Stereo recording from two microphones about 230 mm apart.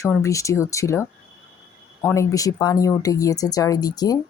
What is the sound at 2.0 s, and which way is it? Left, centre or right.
Speech, centre.